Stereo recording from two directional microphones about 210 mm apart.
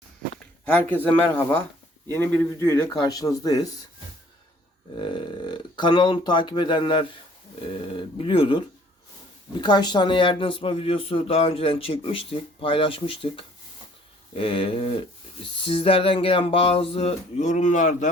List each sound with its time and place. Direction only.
0.6 s speech: 10° left (ahead or behind)
4.9 s speech: 25° left (ahead or behind)